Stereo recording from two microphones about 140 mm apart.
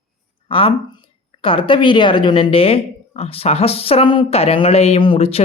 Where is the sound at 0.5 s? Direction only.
40° left (ahead or behind).